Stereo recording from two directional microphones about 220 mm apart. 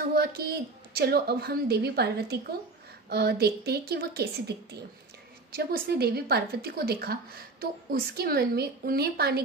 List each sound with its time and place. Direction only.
0.1 s a woman's voice: 45° right (ahead or behind)